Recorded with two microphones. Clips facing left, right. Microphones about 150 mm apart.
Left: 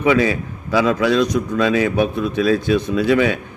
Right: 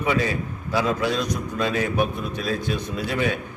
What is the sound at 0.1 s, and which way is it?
Speech, 90° left.